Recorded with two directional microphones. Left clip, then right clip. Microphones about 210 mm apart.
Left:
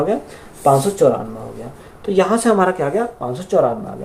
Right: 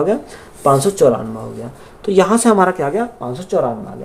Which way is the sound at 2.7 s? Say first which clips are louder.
Right 1 dB; 25° right (ahead or behind).